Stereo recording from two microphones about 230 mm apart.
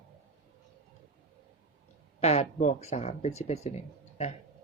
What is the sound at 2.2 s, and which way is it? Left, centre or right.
Speech, left.